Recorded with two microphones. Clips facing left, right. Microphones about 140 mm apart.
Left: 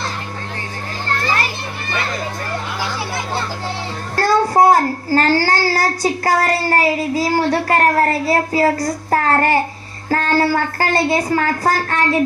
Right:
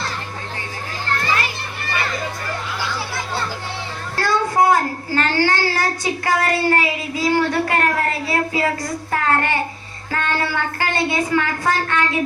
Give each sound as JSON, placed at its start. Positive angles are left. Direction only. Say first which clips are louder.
{"t": 4.2, "sound": "a child's voice", "louder": "left 4 dB", "side_deg": 35}